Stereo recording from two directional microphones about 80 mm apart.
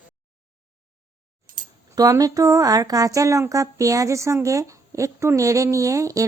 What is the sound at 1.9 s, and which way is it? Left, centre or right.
Speech, right.